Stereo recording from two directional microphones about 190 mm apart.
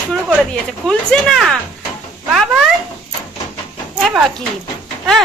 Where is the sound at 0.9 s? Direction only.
Centre (ahead or behind).